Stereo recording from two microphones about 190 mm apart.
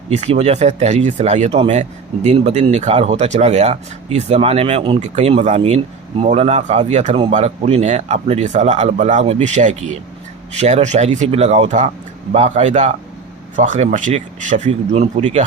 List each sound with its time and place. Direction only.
0.1 s speech: 35° right (ahead or behind)